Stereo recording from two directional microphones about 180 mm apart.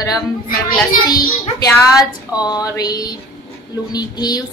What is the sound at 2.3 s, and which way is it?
A woman's voice, 20° left (ahead or behind).